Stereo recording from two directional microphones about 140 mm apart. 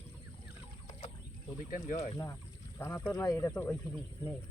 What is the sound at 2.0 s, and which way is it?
Speech, 20° left (ahead or behind).